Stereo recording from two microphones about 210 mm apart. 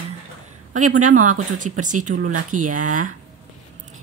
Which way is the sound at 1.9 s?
90° right.